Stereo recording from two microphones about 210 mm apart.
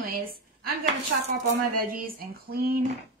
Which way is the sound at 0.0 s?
45° right (ahead or behind).